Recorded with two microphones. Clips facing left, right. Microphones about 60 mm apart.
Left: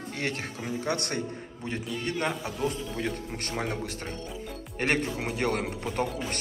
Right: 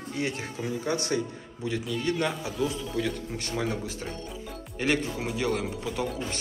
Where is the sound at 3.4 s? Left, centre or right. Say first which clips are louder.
Right 2 dB; left.